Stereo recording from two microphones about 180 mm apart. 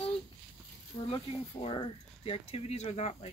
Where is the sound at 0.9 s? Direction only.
30° left (ahead or behind).